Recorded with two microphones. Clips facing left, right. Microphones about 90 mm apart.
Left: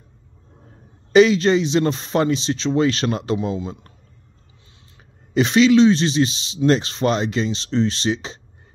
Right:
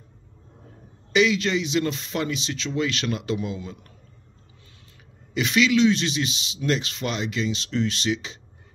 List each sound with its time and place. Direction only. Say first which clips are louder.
1.1 s a man's voice: left 8 dB; 35° left (ahead or behind)
3.4 s a man's voice: left 7 dB; 25° left (ahead or behind)
5.3 s a man's voice: left 7 dB; 35° left (ahead or behind)